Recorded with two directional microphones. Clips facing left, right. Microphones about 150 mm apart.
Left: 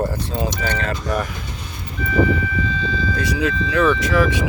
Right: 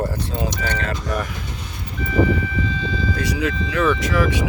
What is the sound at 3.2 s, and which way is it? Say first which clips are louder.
Speech: left 3 dB; 30° left (ahead or behind).